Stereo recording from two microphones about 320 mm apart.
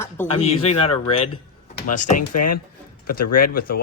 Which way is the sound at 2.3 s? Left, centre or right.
Left.